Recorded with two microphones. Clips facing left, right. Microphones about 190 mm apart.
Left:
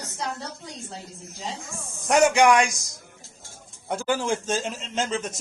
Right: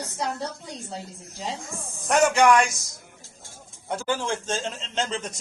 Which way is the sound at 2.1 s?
15° left (ahead or behind).